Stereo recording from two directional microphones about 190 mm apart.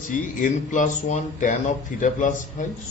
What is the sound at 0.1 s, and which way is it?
A man's voice, 40° left (ahead or behind).